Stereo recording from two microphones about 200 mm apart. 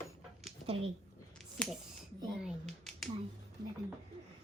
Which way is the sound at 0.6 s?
30° right (ahead or behind).